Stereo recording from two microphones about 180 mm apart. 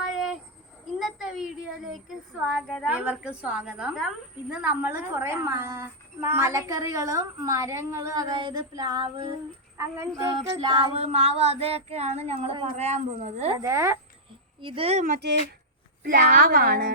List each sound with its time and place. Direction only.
0.9 s speech: 5° right (ahead or behind)
10.2 s music: 25° right (ahead or behind)
13.6 s speech: 15° right (ahead or behind)
14.6 s music: 30° right (ahead or behind)
15.0 s a woman's voice: 60° right (ahead or behind)